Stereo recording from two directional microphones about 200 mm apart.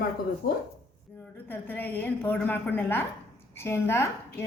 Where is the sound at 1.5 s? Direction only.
10° left (ahead or behind).